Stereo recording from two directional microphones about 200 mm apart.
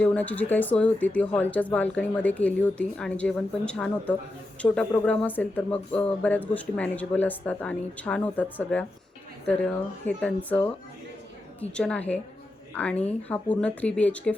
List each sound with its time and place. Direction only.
0.0 s speech: 5° left (ahead or behind)
11.7 s a woman's voice: 5° left (ahead or behind)